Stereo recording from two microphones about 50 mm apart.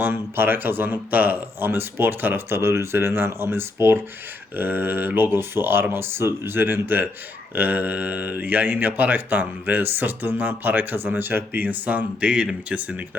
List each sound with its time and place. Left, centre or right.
0.0 s speech: right
4.5 s speech: right